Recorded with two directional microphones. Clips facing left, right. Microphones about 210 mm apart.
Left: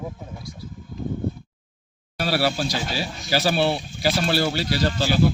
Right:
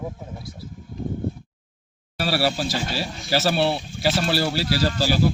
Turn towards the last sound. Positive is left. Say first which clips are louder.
# right 1 dB
turn(degrees=-5)  # may be behind; listen again after turning